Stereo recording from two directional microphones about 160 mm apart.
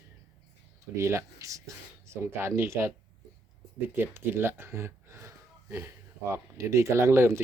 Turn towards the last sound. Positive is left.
turn(degrees=-15)  # may be behind; listen again after turning